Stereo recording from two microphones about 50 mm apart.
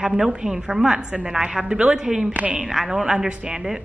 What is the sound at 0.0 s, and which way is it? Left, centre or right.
A woman's voice, centre.